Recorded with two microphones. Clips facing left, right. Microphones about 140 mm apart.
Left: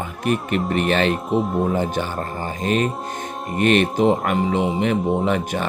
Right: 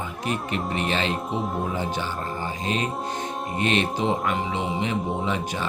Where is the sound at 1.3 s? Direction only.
Centre (ahead or behind).